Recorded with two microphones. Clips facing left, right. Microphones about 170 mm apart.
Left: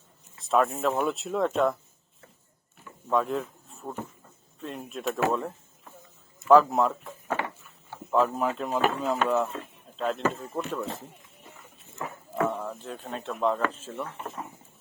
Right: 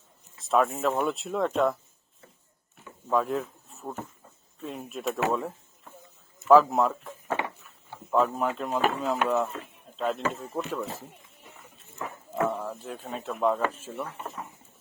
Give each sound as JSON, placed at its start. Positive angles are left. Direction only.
{"t": 0.3, "sound": "speech", "side_deg": 0}
{"t": 3.1, "sound": "speech", "side_deg": 0}
{"t": 7.3, "sound": "a sound", "side_deg": -20}
{"t": 8.1, "sound": "speech", "side_deg": 0}
{"t": 12.5, "sound": "speech", "side_deg": 0}